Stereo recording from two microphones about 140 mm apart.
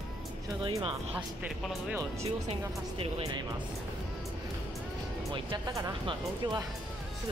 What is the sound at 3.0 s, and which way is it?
Speech, 40° right (ahead or behind).